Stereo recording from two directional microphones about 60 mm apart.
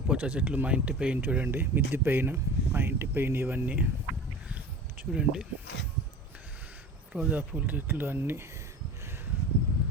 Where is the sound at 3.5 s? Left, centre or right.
Right.